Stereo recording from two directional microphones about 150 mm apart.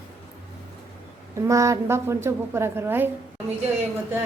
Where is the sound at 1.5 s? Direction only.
20° right (ahead or behind).